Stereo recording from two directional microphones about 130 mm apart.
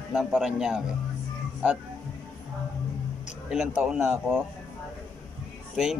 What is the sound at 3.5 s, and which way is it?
Speech, 5° right (ahead or behind).